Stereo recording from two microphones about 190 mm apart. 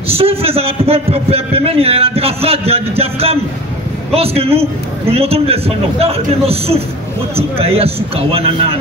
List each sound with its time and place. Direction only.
0.1 s a man's voice: 30° right (ahead or behind)